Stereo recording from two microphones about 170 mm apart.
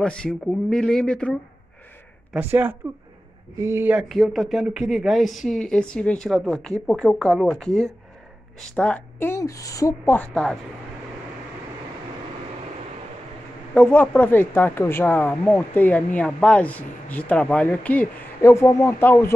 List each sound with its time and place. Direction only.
0.0 s speech: 5° left (ahead or behind)
2.3 s speech: 10° right (ahead or behind)
4.1 s speech: centre (ahead or behind); by 10.1 s 20° left (ahead or behind)
10.1 s speech: 5° left (ahead or behind)
13.7 s speech: 10° left (ahead or behind)